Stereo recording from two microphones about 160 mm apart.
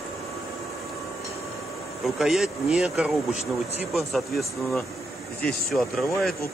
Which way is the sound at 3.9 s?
Centre (ahead or behind).